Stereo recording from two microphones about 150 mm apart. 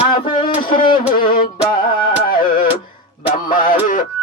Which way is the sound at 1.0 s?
75° left (ahead or behind).